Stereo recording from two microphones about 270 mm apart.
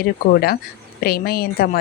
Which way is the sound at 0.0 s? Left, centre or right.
Left.